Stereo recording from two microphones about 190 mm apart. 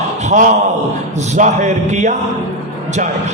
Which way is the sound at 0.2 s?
40° right (ahead or behind).